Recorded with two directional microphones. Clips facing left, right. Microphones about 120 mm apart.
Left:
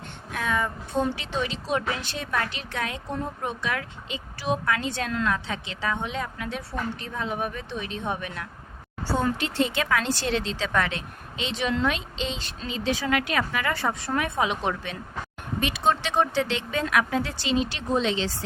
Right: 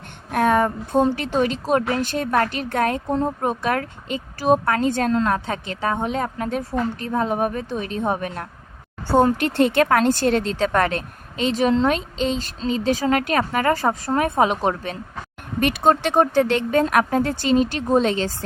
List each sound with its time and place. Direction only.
0.3 s a sound: 55° right (ahead or behind)
1.1 s speech: 50° right (ahead or behind)
9.4 s a woman's voice: 55° right (ahead or behind)